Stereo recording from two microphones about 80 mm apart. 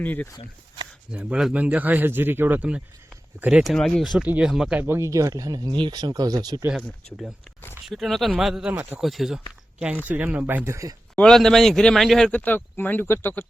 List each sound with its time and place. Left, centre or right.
0.0 s speech: left
1.1 s a man's voice: centre
3.5 s speech: centre
4.2 s speech: centre
4.8 s speech: right
5.7 s speech: right
6.7 s speech: centre
9.0 s speech: centre
9.8 s a man's voice: centre
10.7 s speech: right
11.1 s a sound: centre
11.3 s speech: centre
12.3 s speech: left